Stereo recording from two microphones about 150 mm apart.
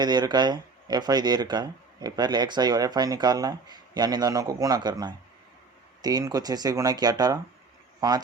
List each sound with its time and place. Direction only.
0.0 s speech: 30° right (ahead or behind)